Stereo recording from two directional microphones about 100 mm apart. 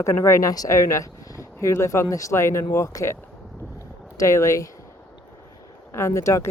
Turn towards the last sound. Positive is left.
turn(degrees=30)  # may be behind; listen again after turning